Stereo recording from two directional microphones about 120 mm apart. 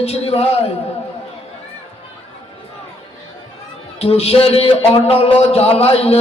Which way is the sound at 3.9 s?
55° left (ahead or behind).